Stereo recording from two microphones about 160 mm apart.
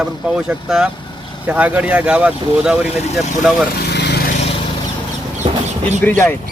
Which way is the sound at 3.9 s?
90° left.